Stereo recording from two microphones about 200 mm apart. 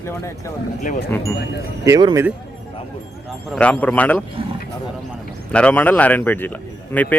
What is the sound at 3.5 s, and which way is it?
Speech, 5° left (ahead or behind).